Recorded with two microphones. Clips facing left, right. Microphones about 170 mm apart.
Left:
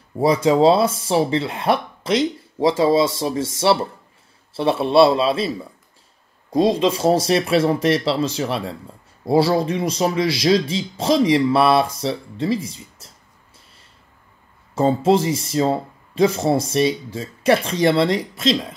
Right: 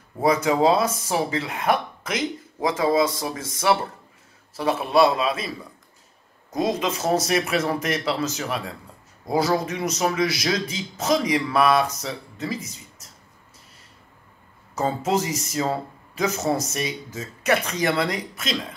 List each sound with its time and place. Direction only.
0.2 s speech: 25° left (ahead or behind)
6.5 s speech: 25° left (ahead or behind)
14.8 s speech: 30° left (ahead or behind)